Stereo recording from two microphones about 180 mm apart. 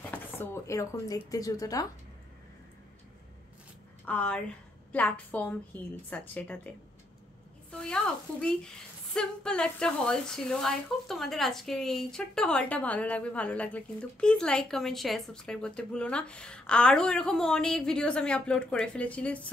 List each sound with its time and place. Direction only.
0.1 s speech: 15° left (ahead or behind)
4.0 s a woman's voice: 5° left (ahead or behind)
7.7 s a woman's voice: 5° left (ahead or behind)